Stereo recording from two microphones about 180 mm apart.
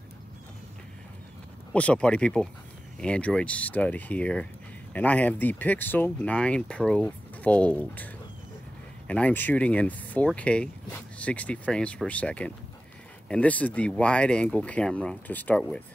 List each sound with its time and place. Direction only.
1.7 s speech: 5° left (ahead or behind)